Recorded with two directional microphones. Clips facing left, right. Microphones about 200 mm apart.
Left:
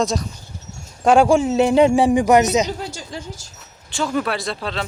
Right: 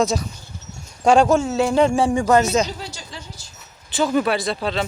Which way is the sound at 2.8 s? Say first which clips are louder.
Left 5 dB; 50° left (ahead or behind).